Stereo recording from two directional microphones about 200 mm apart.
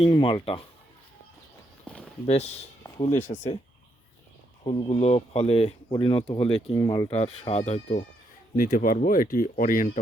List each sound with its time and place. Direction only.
0.0 s speech: 25° left (ahead or behind)
2.2 s speech: 30° left (ahead or behind)
2.8 s a sound: 15° left (ahead or behind)
3.2 s speech: 35° left (ahead or behind)
4.6 s speech: 25° left (ahead or behind)
6.7 s speech: 20° left (ahead or behind)
7.1 s speech: 30° left (ahead or behind)
8.5 s speech: 45° left (ahead or behind)